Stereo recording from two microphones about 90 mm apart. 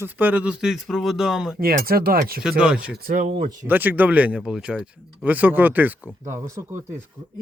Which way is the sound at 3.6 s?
20° right (ahead or behind).